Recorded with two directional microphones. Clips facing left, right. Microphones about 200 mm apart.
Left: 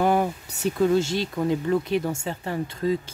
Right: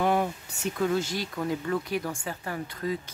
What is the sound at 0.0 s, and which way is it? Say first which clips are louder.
Speech: left 4 dB; 40° left (ahead or behind).